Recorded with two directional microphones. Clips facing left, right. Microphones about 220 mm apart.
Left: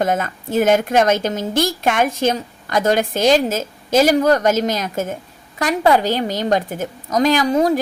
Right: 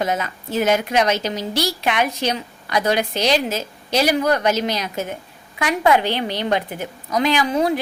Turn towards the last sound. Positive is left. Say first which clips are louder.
# left 3 dB
turn(degrees=40)  # may be behind; listen again after turning